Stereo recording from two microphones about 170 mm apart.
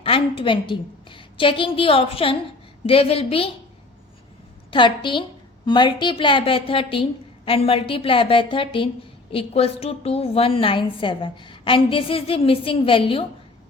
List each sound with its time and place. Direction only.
0.0 s a woman's voice: 30° left (ahead or behind)
4.7 s a woman's voice: 30° left (ahead or behind)